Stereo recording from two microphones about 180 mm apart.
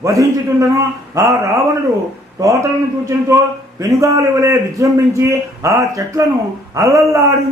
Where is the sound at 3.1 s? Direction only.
15° right (ahead or behind).